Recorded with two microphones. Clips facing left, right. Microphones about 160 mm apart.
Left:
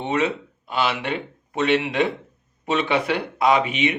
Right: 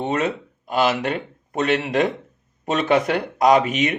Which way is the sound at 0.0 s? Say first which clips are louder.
Even; 40° right (ahead or behind).